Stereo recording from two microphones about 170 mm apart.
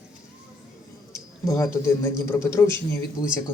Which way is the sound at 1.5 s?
20° left (ahead or behind).